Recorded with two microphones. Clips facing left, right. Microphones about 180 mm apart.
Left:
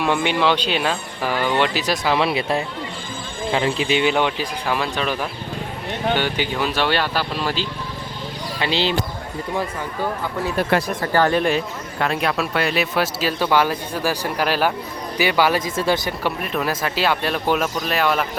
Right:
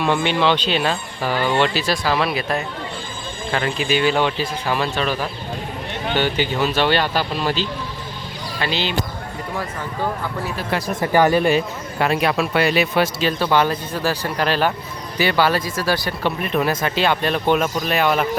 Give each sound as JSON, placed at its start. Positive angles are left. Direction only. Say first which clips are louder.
{"t": 0.0, "sound": "speech", "louder": "right 1 dB", "side_deg": 10}
{"t": 6.7, "sound": "speech", "louder": "right 2 dB", "side_deg": 10}
{"t": 8.6, "sound": "speech", "louder": "left 2 dB", "side_deg": 30}
{"t": 10.6, "sound": "speech", "louder": "left 6 dB", "side_deg": 60}
{"t": 11.0, "sound": "speech", "louder": "right 6 dB", "side_deg": -15}
{"t": 16.2, "sound": "speech", "louder": "right 3 dB", "side_deg": 0}